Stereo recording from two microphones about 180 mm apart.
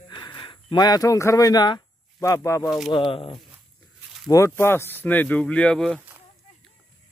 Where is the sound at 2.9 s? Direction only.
30° left (ahead or behind).